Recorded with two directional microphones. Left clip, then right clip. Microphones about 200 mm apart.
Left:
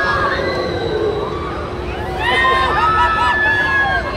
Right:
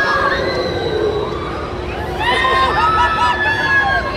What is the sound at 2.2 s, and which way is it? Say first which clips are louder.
Run: even; centre (ahead or behind).